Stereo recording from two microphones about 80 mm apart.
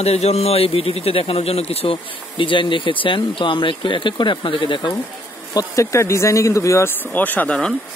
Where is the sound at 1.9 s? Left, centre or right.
Left.